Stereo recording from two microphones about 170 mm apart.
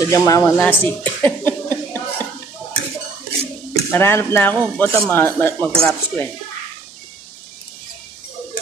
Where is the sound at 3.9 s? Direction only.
15° left (ahead or behind).